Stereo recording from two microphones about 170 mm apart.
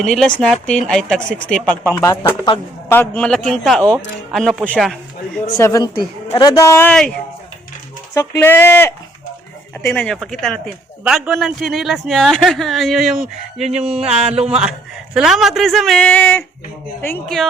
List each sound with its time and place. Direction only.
0.0 s a man's voice: centre (ahead or behind); by 3.0 s 20° left (ahead or behind)
3.0 s a man's voice: 5° left (ahead or behind)
5.5 s speech: 20° left (ahead or behind)
6.2 s speech: 30° left (ahead or behind)
6.6 s a man's voice: 15° left (ahead or behind)
6.9 s speech: 5° left (ahead or behind)
8.1 s a man's voice: 15° left (ahead or behind)